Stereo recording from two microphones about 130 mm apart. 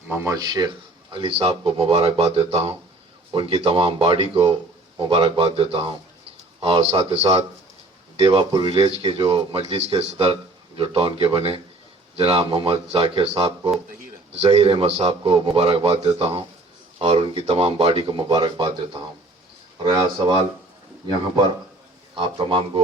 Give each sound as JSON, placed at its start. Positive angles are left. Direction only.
{"t": 0.1, "sound": "speech", "side_deg": -25}
{"t": 1.1, "sound": "speech", "side_deg": -45}
{"t": 7.1, "sound": "a man's voice", "side_deg": -55}
{"t": 19.8, "sound": "a man's voice", "side_deg": -35}
{"t": 22.1, "sound": "a man's voice", "side_deg": -40}